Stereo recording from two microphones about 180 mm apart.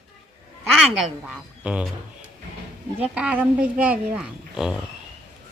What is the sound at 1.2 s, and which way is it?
Speech, centre (ahead or behind).